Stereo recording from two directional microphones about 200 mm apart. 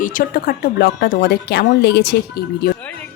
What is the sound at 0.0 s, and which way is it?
Music, 40° left (ahead or behind).